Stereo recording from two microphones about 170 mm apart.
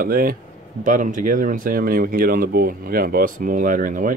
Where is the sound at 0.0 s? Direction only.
60° right (ahead or behind).